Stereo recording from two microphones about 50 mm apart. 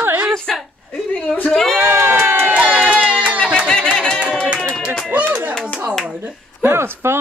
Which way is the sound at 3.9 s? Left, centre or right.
Centre.